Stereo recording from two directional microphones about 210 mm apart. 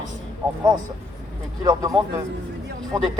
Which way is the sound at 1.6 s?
15° right (ahead or behind).